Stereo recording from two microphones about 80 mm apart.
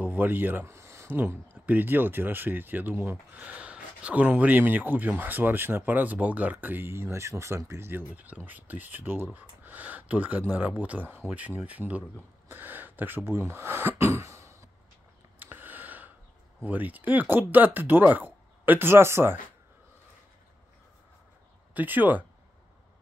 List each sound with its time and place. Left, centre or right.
0.0 s speech: right
8.1 s speech: centre; by 14.7 s right
15.3 s a sound: right
16.6 s speech: right
21.7 s speech: right